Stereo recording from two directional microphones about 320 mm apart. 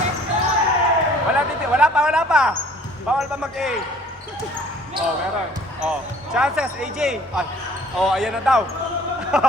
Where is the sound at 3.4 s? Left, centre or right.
Centre.